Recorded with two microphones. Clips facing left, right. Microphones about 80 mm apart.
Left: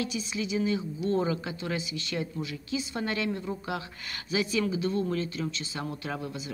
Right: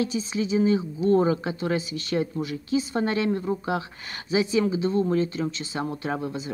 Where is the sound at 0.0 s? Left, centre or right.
Right.